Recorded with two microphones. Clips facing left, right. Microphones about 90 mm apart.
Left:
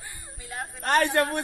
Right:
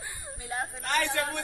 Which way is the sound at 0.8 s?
45° left (ahead or behind).